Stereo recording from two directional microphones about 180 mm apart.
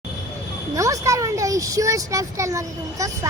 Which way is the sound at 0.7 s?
20° right (ahead or behind).